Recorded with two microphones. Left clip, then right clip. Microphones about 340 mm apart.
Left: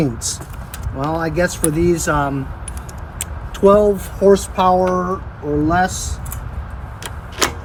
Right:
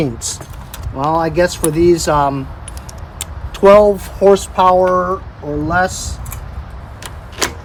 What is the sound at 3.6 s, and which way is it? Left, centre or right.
Speech, centre.